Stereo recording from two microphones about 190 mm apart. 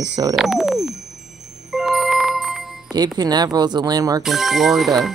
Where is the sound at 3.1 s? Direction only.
20° right (ahead or behind).